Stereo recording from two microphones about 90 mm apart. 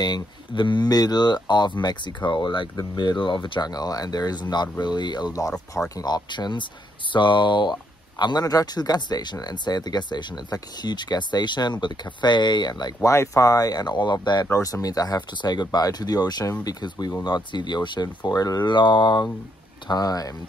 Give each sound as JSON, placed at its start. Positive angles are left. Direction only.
{"t": 0.0, "sound": "speech", "side_deg": 55}
{"t": 3.7, "sound": "speech", "side_deg": 45}
{"t": 13.0, "sound": "speech", "side_deg": 35}
{"t": 14.5, "sound": "speech", "side_deg": 40}
{"t": 19.9, "sound": "speech", "side_deg": 45}